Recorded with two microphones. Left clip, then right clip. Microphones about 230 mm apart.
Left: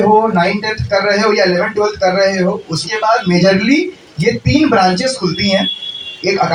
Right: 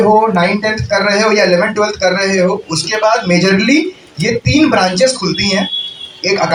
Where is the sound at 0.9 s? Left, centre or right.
Right.